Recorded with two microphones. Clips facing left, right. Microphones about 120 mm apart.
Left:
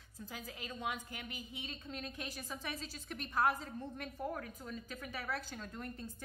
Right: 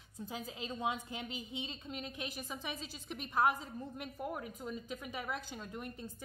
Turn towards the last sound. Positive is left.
turn(degrees=-15)  # may be behind; listen again after turning